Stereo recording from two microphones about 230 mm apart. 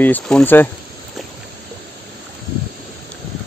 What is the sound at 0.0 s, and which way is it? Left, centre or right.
Speech, centre.